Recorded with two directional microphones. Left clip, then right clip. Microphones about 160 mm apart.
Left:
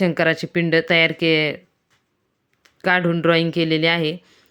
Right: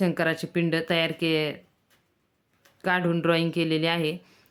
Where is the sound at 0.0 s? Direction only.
25° left (ahead or behind).